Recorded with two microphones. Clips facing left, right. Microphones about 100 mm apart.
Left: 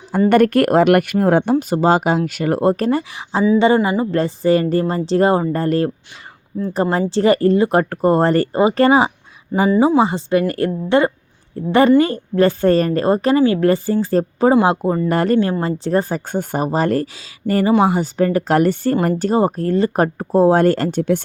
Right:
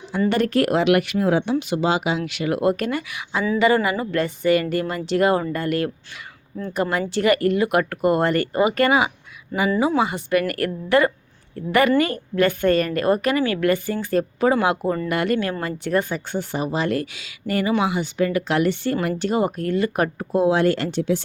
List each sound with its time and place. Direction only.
0.3 s speech: 55° left (ahead or behind); by 15.1 s 20° left (ahead or behind)
15.1 s speech: 35° left (ahead or behind)